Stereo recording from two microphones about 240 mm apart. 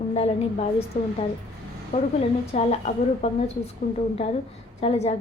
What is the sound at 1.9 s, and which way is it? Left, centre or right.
A woman's voice, left.